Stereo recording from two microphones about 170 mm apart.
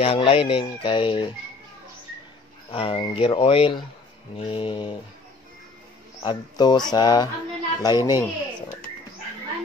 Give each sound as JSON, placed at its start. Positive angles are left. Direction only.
{"t": 0.0, "sound": "speech", "side_deg": 35}
{"t": 2.7, "sound": "speech", "side_deg": 35}
{"t": 6.2, "sound": "speech", "side_deg": 25}